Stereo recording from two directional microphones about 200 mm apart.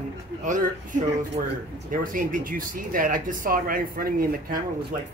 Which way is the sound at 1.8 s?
45° right (ahead or behind).